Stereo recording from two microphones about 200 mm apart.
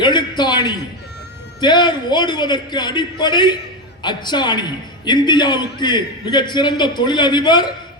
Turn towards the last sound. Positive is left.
turn(degrees=20)  # may be behind; listen again after turning